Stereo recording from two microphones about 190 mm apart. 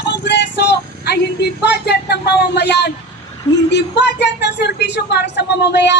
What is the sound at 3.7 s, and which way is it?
Speech, 65° left (ahead or behind).